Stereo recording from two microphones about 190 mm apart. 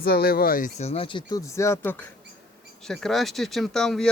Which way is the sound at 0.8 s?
30° left (ahead or behind).